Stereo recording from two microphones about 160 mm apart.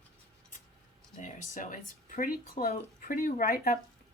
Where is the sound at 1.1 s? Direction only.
50° left (ahead or behind); by 3.8 s 65° left (ahead or behind).